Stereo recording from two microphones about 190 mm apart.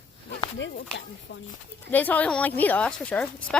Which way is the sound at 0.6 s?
70° left (ahead or behind).